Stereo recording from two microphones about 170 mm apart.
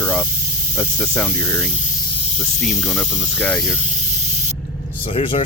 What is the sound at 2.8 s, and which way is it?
Speech, 15° left (ahead or behind).